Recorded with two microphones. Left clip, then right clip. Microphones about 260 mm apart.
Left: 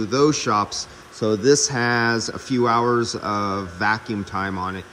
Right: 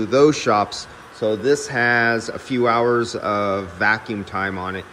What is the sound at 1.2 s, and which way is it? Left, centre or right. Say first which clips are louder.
Speech: right 1 dB; left.